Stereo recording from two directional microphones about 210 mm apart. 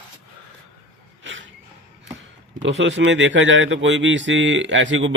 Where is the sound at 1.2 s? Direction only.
65° right (ahead or behind).